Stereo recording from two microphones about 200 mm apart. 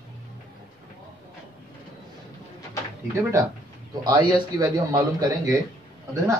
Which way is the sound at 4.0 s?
20° right (ahead or behind).